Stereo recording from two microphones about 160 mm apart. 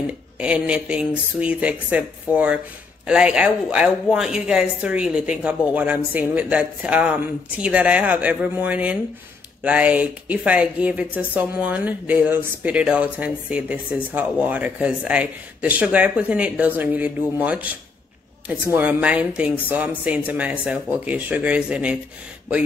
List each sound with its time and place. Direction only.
0.0 s speech: 5° right (ahead or behind)